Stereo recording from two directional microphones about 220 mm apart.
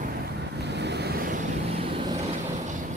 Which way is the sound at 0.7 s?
50° right (ahead or behind).